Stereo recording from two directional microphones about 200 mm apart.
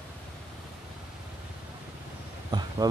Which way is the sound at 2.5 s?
20° right (ahead or behind).